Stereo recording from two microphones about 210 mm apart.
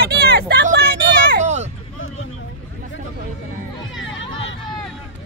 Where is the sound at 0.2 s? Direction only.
50° right (ahead or behind).